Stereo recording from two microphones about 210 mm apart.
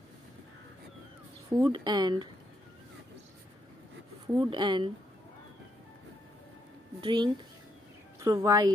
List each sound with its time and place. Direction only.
1.5 s speech: 20° right (ahead or behind)
4.5 s speech: 20° right (ahead or behind)
7.0 s a woman's voice: 20° right (ahead or behind)